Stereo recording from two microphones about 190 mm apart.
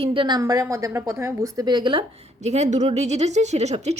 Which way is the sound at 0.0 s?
25° right (ahead or behind).